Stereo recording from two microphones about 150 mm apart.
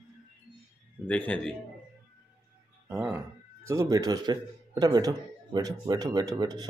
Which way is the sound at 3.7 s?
20° right (ahead or behind).